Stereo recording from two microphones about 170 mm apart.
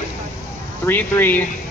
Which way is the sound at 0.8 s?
10° left (ahead or behind).